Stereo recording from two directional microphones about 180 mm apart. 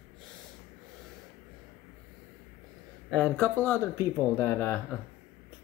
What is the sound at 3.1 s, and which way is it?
Speech, 5° left (ahead or behind).